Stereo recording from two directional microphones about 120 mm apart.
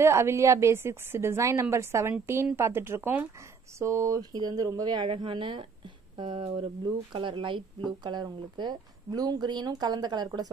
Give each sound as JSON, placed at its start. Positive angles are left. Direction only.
{"t": 0.0, "sound": "a woman's voice", "side_deg": -25}